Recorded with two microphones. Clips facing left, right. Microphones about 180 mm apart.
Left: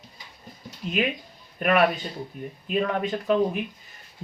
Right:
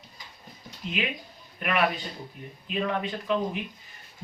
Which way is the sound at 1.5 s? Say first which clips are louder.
Left 5 dB; 45° left (ahead or behind).